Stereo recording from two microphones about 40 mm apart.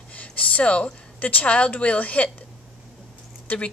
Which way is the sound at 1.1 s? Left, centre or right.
Left.